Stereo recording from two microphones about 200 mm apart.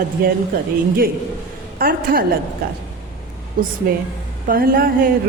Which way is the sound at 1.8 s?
45° right (ahead or behind).